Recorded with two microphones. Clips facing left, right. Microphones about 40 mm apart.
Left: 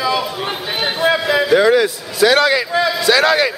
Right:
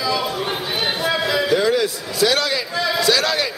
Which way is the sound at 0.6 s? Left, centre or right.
Centre.